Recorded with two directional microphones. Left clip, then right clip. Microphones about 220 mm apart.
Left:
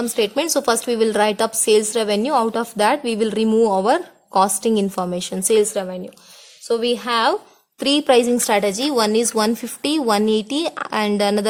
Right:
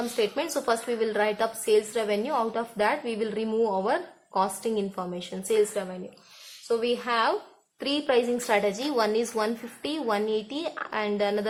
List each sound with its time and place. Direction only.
0.2 s a woman's voice: 45° left (ahead or behind)